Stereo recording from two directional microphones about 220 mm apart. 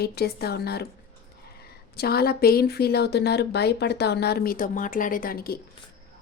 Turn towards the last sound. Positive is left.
turn(degrees=45)  # may be behind; listen again after turning